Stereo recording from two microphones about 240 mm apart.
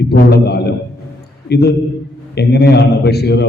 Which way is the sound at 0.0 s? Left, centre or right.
Left.